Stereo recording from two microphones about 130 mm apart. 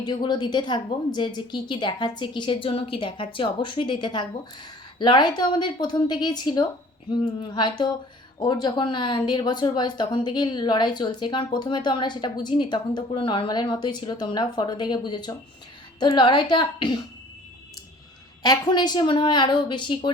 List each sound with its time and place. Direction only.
0.0 s speech: 35° left (ahead or behind)
18.4 s speech: 30° left (ahead or behind)